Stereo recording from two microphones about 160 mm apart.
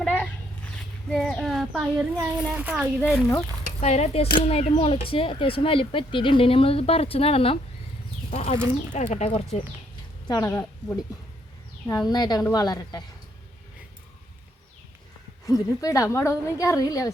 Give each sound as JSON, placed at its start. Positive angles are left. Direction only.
{"t": 0.0, "sound": "a sound", "side_deg": 5}
{"t": 1.1, "sound": "a child's voice", "side_deg": 0}
{"t": 3.8, "sound": "speech", "side_deg": 45}
{"t": 10.2, "sound": "a woman's voice", "side_deg": 25}
{"t": 10.5, "sound": "speech", "side_deg": 10}
{"t": 11.9, "sound": "a woman's voice", "side_deg": 25}
{"t": 15.4, "sound": "a woman's voice", "side_deg": 20}